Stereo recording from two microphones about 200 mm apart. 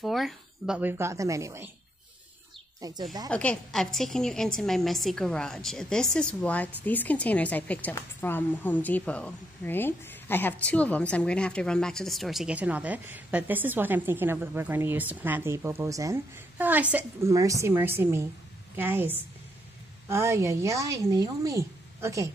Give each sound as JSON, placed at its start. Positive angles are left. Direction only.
{"t": 0.0, "sound": "speech", "side_deg": 0}
{"t": 2.8, "sound": "speech", "side_deg": -20}
{"t": 3.3, "sound": "a woman's voice", "side_deg": 5}